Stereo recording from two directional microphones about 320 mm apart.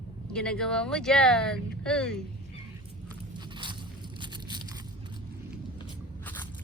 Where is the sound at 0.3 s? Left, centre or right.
Centre.